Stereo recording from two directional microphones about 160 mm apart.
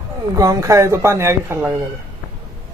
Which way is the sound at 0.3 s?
20° right (ahead or behind).